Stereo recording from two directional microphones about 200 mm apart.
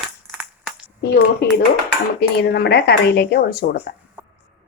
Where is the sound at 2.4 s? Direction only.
55° left (ahead or behind).